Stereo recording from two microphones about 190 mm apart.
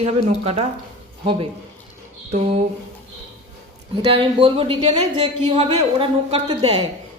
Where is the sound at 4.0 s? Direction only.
25° right (ahead or behind).